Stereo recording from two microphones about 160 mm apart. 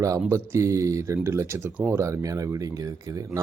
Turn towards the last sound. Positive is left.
turn(degrees=-20)  # may be behind; listen again after turning